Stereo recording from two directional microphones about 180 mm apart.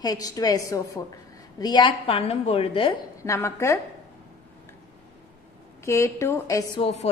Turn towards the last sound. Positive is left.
turn(degrees=35)  # may be behind; listen again after turning